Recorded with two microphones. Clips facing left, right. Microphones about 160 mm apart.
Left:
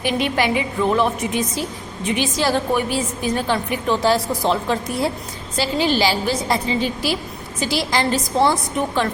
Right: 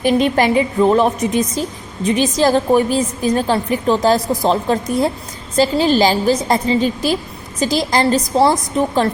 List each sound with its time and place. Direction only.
0.0 s a woman's voice: 40° right (ahead or behind)